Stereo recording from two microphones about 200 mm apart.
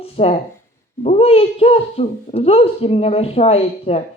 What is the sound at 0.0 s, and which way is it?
Speech, 30° left (ahead or behind).